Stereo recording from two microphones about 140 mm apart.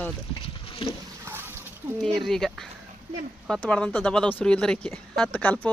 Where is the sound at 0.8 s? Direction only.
40° left (ahead or behind).